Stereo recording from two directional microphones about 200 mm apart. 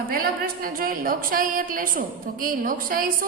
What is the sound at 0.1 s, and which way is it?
A woman's voice, 45° right (ahead or behind).